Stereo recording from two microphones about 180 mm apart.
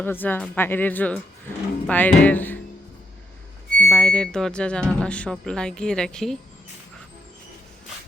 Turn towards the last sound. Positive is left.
turn(degrees=5)  # may be behind; listen again after turning